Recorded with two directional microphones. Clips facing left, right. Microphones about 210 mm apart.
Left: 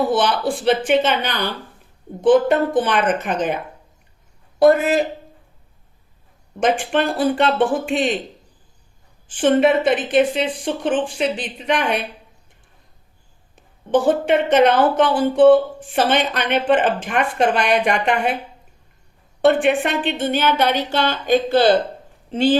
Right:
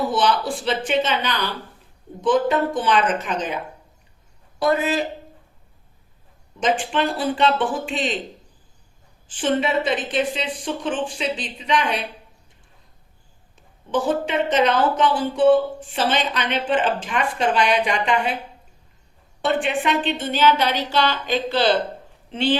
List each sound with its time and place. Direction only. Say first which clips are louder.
0.1 s speech: left 2 dB; 60° left (ahead or behind)
6.6 s speech: left 3 dB; 55° left (ahead or behind)
9.2 s speech: left 7 dB; 55° left (ahead or behind)
13.9 s speech: left 5 dB; 55° left (ahead or behind)
19.4 s speech: left 7 dB; 55° left (ahead or behind)